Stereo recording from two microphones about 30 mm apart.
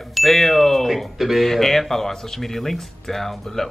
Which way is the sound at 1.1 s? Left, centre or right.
Centre.